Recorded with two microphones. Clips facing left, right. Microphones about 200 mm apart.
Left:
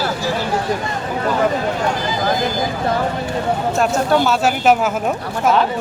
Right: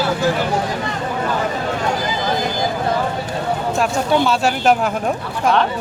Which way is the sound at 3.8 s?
Centre (ahead or behind).